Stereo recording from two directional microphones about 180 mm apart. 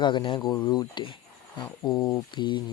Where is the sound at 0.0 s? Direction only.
25° left (ahead or behind).